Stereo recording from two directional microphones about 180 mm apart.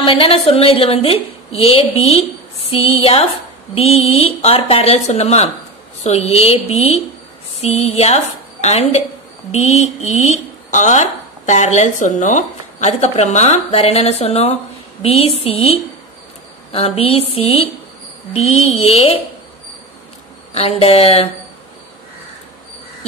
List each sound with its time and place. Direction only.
0.0 s speech: 30° left (ahead or behind)
20.5 s speech: 35° left (ahead or behind)